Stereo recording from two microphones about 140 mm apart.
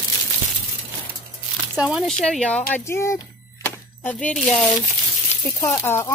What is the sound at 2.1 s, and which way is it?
Speech, 5° left (ahead or behind).